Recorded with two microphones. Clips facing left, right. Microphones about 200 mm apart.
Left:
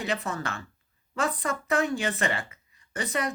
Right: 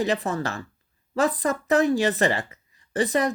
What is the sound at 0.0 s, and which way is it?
Speech, 35° right (ahead or behind).